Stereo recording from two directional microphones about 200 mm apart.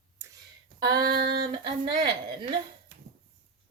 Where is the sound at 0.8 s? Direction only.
20° right (ahead or behind).